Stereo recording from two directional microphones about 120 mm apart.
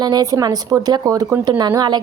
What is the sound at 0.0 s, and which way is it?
A woman's voice, 30° right (ahead or behind).